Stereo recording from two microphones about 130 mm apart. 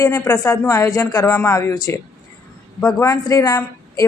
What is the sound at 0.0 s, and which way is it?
Speech, 25° left (ahead or behind).